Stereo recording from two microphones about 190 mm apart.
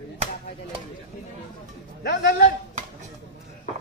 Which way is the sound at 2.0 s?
65° left (ahead or behind).